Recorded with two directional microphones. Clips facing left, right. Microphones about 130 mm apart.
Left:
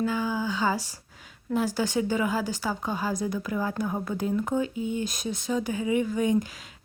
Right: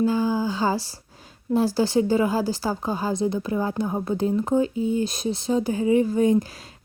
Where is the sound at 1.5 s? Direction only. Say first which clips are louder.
Right 6 dB; 30° right (ahead or behind).